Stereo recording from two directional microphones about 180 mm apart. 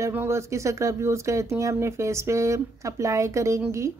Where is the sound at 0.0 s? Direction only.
15° right (ahead or behind).